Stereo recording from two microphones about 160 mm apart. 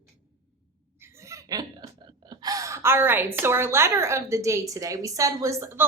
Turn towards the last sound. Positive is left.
turn(degrees=-15)  # may be behind; listen again after turning